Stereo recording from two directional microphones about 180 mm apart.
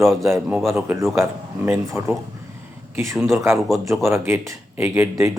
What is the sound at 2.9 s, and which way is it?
Speech, 15° right (ahead or behind).